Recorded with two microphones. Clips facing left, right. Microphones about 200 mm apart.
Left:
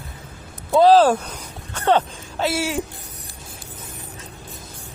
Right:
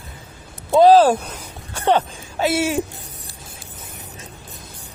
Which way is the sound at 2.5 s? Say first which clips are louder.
Right 4 dB; 25° right (ahead or behind).